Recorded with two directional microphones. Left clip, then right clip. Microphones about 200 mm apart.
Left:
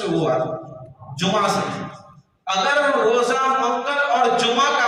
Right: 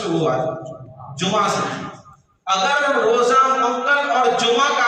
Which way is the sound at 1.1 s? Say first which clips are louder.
Right 1 dB; 15° left (ahead or behind).